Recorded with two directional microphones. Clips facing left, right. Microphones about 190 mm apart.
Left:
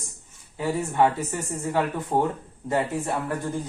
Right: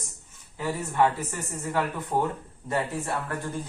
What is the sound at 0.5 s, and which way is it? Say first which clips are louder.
Speech: left 3 dB; 20° left (ahead or behind).